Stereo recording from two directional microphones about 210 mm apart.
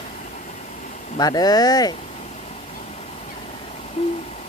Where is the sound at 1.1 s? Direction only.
20° left (ahead or behind).